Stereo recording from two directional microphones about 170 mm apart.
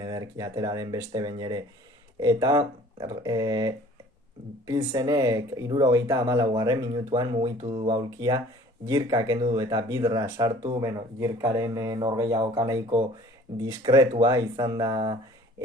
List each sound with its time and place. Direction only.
0.0 s speech: 20° right (ahead or behind)